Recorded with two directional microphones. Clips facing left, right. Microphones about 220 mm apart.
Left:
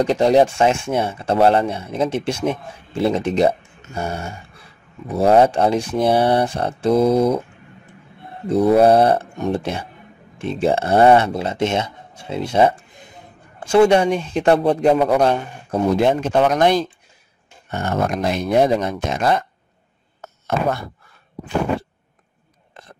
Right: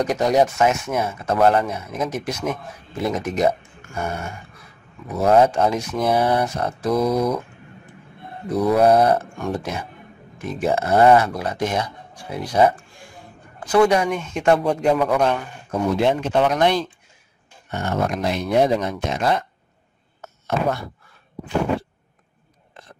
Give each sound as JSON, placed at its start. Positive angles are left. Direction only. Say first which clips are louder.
{"t": 0.0, "sound": "speech", "louder": "left 4 dB", "side_deg": 30}
{"t": 8.5, "sound": "speech", "louder": "left 3 dB", "side_deg": 25}
{"t": 16.0, "sound": "speech", "louder": "left 1 dB", "side_deg": 45}
{"t": 20.4, "sound": "speech", "louder": "left 1 dB", "side_deg": 50}